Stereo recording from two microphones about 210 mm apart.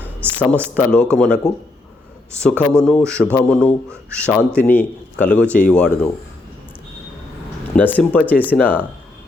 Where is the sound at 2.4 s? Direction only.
5° left (ahead or behind).